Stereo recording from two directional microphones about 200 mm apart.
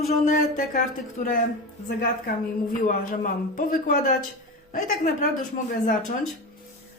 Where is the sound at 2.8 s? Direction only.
40° left (ahead or behind).